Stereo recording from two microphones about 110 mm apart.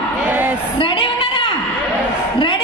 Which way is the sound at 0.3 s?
15° right (ahead or behind).